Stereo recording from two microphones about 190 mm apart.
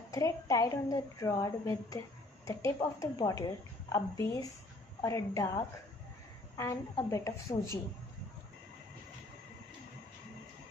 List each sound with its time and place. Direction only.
0.1 s a woman's voice: 20° left (ahead or behind)